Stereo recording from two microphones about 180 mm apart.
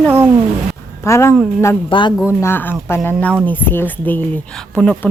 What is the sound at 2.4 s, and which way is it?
A woman's voice, 10° left (ahead or behind).